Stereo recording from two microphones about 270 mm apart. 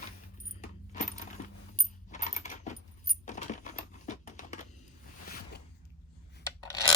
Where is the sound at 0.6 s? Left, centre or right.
Left.